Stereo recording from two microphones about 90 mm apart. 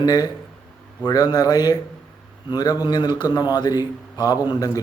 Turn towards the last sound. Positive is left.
turn(degrees=45)  # may be behind; listen again after turning